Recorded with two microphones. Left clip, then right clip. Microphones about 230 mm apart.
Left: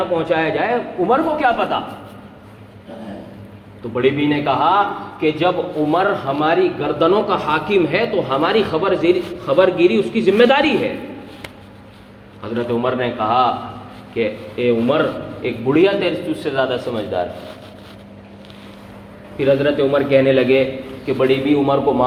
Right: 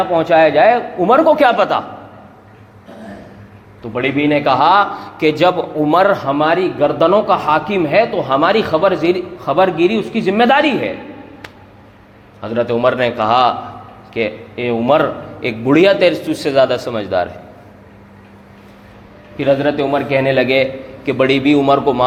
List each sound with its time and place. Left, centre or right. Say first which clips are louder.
0.1 s a man's voice: right 7 dB; right
3.9 s speech: right 2 dB; right
12.4 s a man's voice: right 5 dB; right
19.4 s a man's voice: right 1 dB; right